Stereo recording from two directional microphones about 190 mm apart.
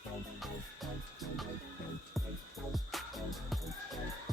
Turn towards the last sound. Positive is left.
turn(degrees=0)  # may be behind; listen again after turning